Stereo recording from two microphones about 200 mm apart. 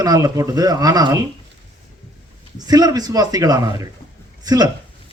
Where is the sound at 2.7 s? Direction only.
20° right (ahead or behind).